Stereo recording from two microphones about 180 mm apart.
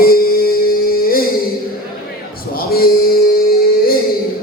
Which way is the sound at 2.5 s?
55° left (ahead or behind).